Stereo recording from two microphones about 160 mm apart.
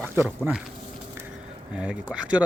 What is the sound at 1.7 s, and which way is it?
Speech, 5° right (ahead or behind).